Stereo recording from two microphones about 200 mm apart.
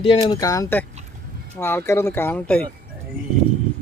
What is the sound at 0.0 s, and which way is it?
Speech, 25° left (ahead or behind).